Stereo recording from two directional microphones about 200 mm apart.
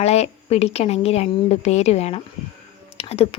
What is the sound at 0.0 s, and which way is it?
A woman's voice, 30° left (ahead or behind).